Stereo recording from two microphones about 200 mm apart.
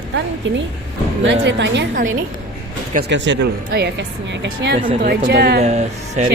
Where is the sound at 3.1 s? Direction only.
60° right (ahead or behind).